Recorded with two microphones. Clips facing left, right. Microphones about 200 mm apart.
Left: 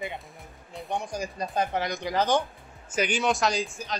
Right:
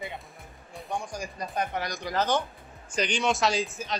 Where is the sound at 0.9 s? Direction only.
25° left (ahead or behind); by 4.0 s centre (ahead or behind).